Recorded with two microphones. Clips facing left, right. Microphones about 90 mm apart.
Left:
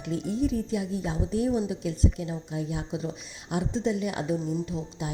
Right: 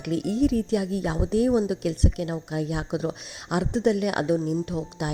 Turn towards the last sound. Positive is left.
turn(degrees=-70)  # may be behind; listen again after turning